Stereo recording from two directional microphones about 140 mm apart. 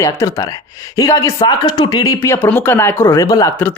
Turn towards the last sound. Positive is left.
turn(degrees=25)  # may be behind; listen again after turning